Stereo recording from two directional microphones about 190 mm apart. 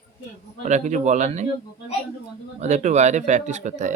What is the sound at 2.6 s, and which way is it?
Speech, 35° right (ahead or behind).